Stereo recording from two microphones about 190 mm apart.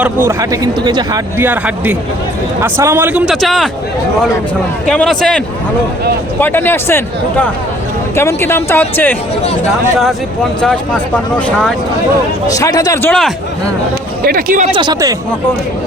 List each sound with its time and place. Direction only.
0.0 s speech: 15° right (ahead or behind)
1.4 s speech: 10° right (ahead or behind)
4.9 s speech: 5° left (ahead or behind)
6.4 s speech: 10° left (ahead or behind)
10.6 s speech: 5° left (ahead or behind)
12.5 s speech: 20° left (ahead or behind)
14.3 s speech: 45° right (ahead or behind)
14.8 s speech: 25° right (ahead or behind)